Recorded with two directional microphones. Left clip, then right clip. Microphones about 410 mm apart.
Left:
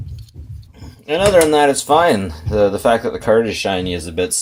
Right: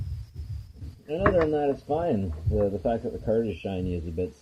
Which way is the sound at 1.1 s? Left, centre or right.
Left.